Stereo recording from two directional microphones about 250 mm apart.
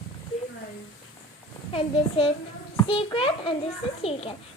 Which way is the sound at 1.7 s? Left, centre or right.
Left.